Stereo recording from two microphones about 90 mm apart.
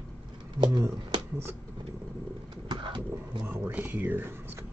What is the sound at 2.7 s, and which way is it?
Pigeon, 60° right (ahead or behind).